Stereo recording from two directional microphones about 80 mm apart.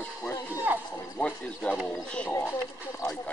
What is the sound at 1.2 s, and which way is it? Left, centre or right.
Speech, centre.